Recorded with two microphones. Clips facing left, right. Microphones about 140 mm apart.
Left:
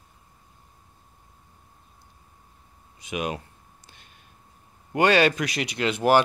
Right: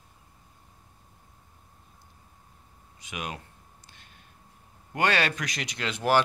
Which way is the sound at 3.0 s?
20° left (ahead or behind).